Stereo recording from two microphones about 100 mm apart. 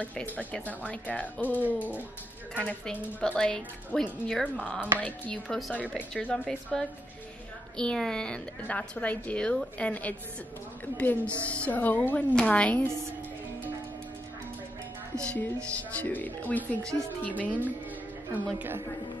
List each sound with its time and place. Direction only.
0.0 s a woman's voice: 15° left (ahead or behind)
1.6 s music: 15° right (ahead or behind)
2.5 s a woman's voice: 15° left (ahead or behind)
5.9 s a woman's voice: 15° left (ahead or behind)
6.3 s a woman's voice: 5° left (ahead or behind)
15.2 s a woman's voice: 15° left (ahead or behind)
18.3 s a woman's voice: 20° right (ahead or behind)